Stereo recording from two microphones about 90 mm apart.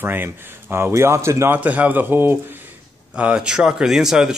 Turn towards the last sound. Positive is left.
turn(degrees=-5)  # may be behind; listen again after turning